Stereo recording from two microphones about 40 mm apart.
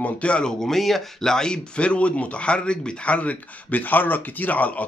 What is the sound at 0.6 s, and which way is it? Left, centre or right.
Speech, centre.